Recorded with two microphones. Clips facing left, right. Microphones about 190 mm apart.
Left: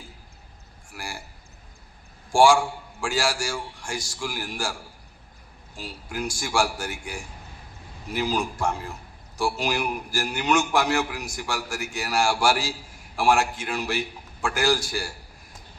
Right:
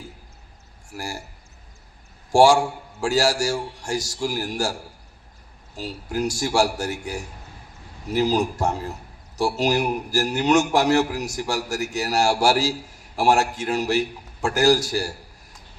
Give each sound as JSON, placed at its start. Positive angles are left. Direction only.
{"t": 0.9, "sound": "a man's voice", "side_deg": -40}
{"t": 2.3, "sound": "a man's voice", "side_deg": -40}